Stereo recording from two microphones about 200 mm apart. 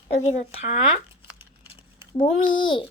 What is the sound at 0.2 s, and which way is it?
Speech, 30° left (ahead or behind).